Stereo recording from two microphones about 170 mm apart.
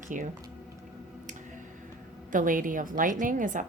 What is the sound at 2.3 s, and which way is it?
Speech, 50° right (ahead or behind).